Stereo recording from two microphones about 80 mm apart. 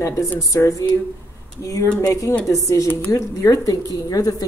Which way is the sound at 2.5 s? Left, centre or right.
Left.